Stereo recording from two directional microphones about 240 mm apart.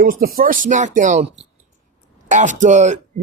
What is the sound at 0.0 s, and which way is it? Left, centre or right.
Speech, right.